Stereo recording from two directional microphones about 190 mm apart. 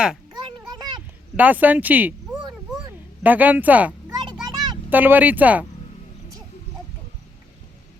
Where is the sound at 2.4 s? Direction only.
20° right (ahead or behind).